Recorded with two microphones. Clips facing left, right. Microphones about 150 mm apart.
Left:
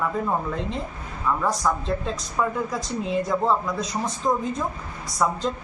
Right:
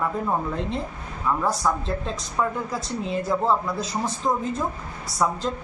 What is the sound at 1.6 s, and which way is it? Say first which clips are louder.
Speech: left 1 dB; centre (ahead or behind).